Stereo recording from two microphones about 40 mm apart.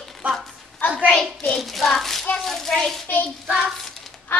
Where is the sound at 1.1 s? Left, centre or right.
Centre.